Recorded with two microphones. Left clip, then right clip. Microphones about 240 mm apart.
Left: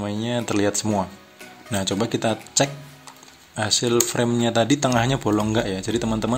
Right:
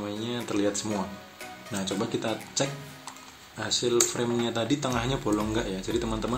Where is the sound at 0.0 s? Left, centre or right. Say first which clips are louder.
Left 7 dB; left.